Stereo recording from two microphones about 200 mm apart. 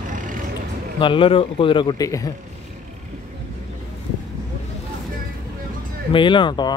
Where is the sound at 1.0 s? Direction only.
25° left (ahead or behind).